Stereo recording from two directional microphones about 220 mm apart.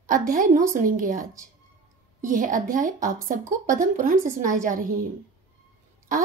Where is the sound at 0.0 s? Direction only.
40° right (ahead or behind).